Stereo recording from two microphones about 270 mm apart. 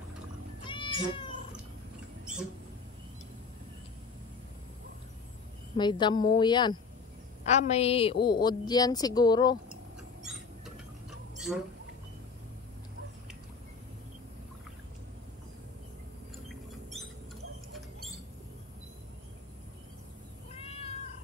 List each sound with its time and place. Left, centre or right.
0.7 s cat: centre
5.8 s a woman's voice: centre
11.3 s a sound: centre
17.7 s rodents: centre